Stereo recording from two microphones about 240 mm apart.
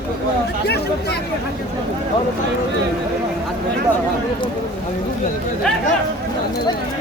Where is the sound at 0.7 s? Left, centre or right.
Left.